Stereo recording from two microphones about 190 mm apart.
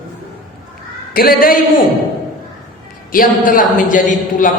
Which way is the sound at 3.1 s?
45° left (ahead or behind).